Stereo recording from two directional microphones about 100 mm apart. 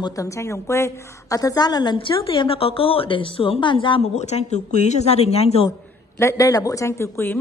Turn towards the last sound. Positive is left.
turn(degrees=20)  # may be behind; listen again after turning